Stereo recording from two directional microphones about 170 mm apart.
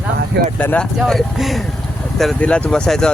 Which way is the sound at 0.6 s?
10° left (ahead or behind).